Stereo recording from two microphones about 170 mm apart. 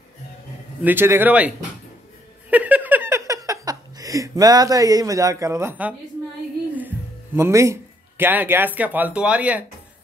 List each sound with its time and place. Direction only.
0.8 s speech: 15° right (ahead or behind)
2.5 s a sound: 10° right (ahead or behind)
3.4 s speech: 20° right (ahead or behind)
7.3 s speech: 15° right (ahead or behind)